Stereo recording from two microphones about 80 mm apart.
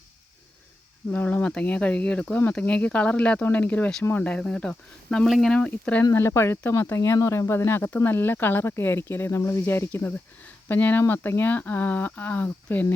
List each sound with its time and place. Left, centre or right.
1.1 s speech: left
6.1 s speech: left